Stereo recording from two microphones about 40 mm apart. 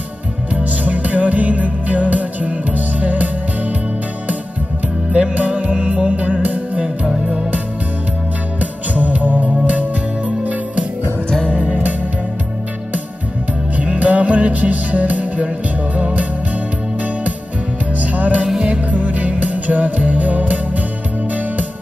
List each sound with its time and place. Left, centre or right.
0.7 s music: right
5.1 s music: right
8.5 s music: right
13.7 s music: right
17.9 s music: right